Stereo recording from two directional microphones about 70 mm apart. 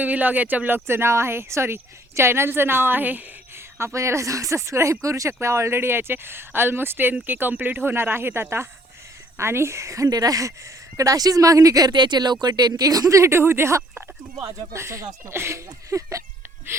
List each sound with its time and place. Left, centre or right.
0.0 s speech: right
0.9 s speech: right
3.8 s speech: right
10.1 s speech: right